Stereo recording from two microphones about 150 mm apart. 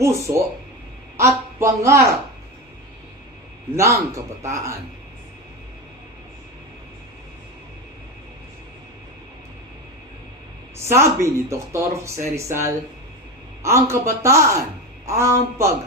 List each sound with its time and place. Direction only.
0.0 s a man's voice: 20° right (ahead or behind)
3.8 s speech: 20° right (ahead or behind)
10.8 s speech: 20° right (ahead or behind)